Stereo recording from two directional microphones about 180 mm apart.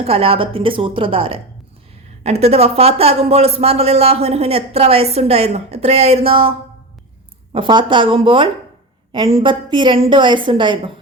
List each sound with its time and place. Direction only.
0.0 s a woman's voice: 30° right (ahead or behind)
7.5 s a woman's voice: 25° right (ahead or behind)